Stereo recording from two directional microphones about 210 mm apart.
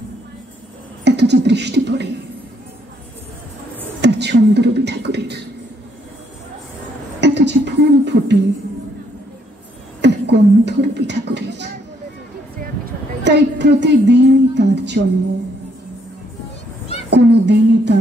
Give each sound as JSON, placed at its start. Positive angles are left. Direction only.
{"t": 1.0, "sound": "a sound", "side_deg": -55}
{"t": 4.0, "sound": "speech", "side_deg": -55}
{"t": 7.2, "sound": "a sound", "side_deg": -55}
{"t": 10.0, "sound": "speech", "side_deg": -55}
{"t": 13.2, "sound": "a woman's voice", "side_deg": -55}
{"t": 17.1, "sound": "a woman's voice", "side_deg": -55}